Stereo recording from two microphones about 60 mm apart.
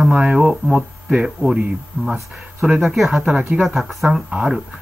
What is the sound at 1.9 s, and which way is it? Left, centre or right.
Speech, right.